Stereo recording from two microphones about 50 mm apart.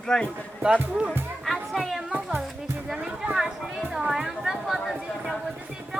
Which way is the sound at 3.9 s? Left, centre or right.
Centre.